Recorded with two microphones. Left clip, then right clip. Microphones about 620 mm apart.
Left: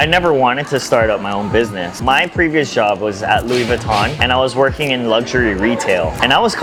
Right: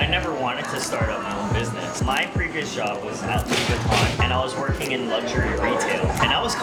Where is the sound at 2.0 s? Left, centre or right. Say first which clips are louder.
Left 12 dB; left.